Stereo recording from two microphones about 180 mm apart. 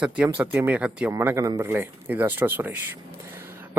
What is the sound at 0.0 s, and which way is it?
Speech, 5° right (ahead or behind).